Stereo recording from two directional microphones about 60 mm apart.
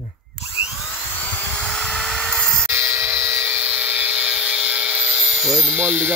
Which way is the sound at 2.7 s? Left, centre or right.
Right.